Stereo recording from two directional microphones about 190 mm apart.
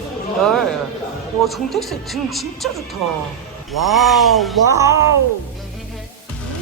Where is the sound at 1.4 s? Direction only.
Centre (ahead or behind).